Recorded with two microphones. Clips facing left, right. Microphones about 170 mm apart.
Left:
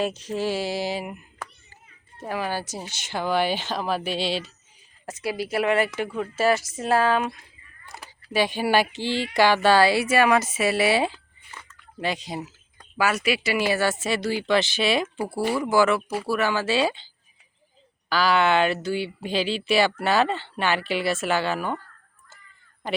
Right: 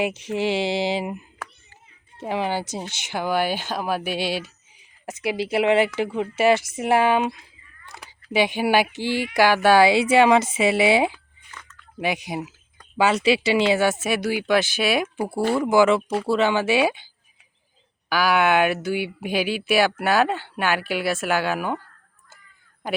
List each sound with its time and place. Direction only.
0.0 s speech: 20° right (ahead or behind)
3.1 s speech: 10° right (ahead or behind)
5.2 s speech: 25° right (ahead or behind)
13.0 s speech: 25° right (ahead or behind)
18.1 s speech: 10° right (ahead or behind)